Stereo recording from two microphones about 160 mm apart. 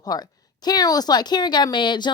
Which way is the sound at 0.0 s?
25° left (ahead or behind).